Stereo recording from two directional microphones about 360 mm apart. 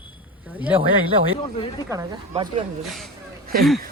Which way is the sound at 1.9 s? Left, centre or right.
Centre.